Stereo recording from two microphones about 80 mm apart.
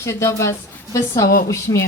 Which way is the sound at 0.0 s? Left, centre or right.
Left.